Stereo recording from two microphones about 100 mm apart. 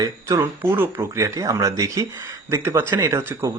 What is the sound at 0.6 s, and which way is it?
Speech, 20° right (ahead or behind).